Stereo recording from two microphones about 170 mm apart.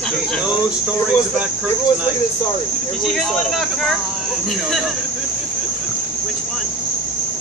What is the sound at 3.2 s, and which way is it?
Speech, centre (ahead or behind).